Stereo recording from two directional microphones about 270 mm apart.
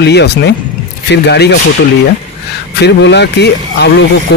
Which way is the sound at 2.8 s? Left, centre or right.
Left.